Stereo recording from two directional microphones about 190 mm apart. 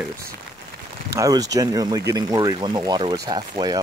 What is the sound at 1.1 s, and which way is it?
Speech, 20° right (ahead or behind).